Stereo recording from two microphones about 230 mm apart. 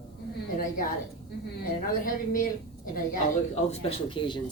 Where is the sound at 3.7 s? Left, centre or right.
Left.